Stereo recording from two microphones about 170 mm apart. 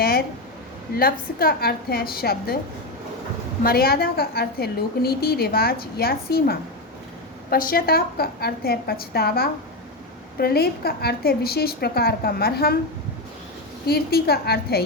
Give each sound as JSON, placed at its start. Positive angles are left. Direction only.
{"t": 0.9, "sound": "a woman's voice", "side_deg": 60}
{"t": 3.6, "sound": "a woman's voice", "side_deg": 65}
{"t": 13.8, "sound": "a woman's voice", "side_deg": 65}